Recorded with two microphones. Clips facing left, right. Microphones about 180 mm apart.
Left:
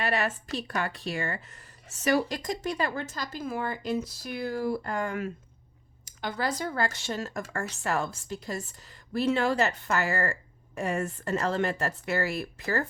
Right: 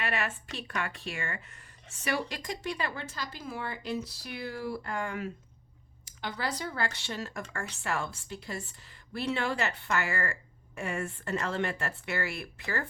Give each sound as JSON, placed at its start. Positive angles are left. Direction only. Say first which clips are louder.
{"t": 0.0, "sound": "a woman's voice", "louder": "left 5 dB", "side_deg": 40}